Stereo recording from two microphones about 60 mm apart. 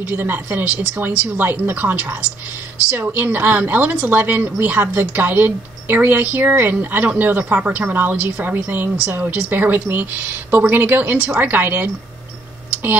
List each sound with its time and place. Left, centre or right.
0.0 s speech: right